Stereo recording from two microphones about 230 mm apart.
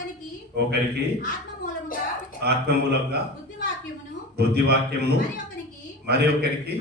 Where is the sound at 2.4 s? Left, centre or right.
Right.